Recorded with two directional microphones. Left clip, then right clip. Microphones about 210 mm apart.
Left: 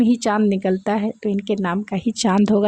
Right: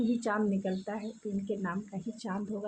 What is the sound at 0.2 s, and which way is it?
Speech, 45° left (ahead or behind).